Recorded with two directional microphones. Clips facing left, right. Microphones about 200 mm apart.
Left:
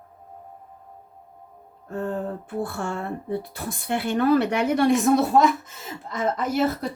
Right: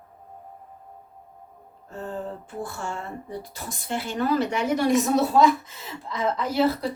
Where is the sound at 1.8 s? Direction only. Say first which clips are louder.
Left 5 dB; 55° left (ahead or behind).